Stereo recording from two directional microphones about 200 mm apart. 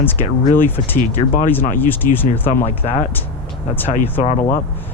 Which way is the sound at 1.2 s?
35° left (ahead or behind).